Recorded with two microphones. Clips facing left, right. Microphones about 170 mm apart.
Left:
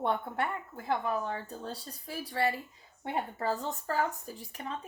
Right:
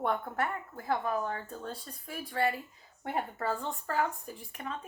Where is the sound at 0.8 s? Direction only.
20° left (ahead or behind).